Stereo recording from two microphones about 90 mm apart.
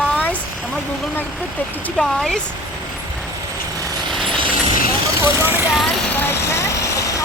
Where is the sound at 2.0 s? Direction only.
5° left (ahead or behind).